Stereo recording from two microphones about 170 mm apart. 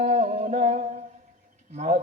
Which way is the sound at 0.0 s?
45° right (ahead or behind).